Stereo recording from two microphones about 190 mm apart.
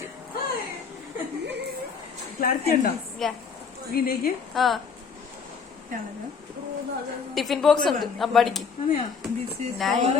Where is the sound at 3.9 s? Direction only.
50° left (ahead or behind).